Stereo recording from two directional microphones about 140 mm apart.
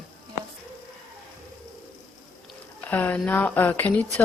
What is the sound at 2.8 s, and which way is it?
Speech, 10° left (ahead or behind).